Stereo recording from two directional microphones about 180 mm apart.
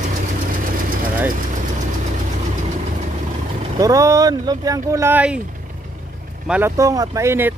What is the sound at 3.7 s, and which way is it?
Speech, 20° right (ahead or behind).